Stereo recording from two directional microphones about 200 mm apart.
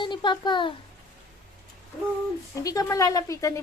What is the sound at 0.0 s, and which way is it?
Speech, 25° left (ahead or behind).